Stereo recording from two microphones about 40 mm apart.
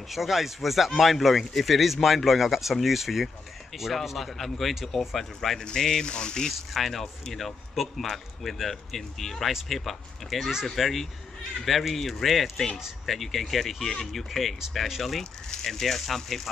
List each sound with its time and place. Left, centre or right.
0.1 s speech: centre
5.6 s speech: centre
6.7 s speech: centre